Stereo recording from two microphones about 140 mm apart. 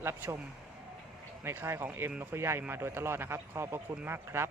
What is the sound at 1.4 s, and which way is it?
Speech, 15° right (ahead or behind).